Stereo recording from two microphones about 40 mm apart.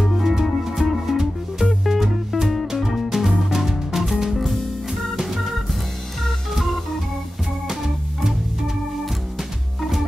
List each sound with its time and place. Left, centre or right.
0.0 s music: centre
9.4 s music: centre